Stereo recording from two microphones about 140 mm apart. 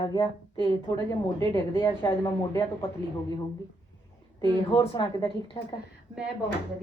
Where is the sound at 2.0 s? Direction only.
30° left (ahead or behind).